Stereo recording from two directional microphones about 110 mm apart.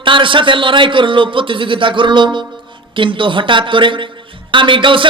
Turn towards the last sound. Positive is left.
turn(degrees=-50)  # may be behind; listen again after turning